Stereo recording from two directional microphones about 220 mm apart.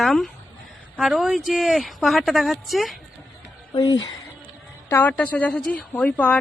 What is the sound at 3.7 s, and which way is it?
Speech, 20° left (ahead or behind).